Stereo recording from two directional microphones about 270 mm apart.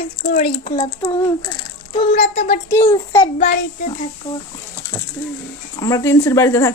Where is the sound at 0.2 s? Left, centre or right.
Left.